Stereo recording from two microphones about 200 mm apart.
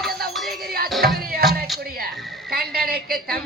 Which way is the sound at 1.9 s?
50° right (ahead or behind).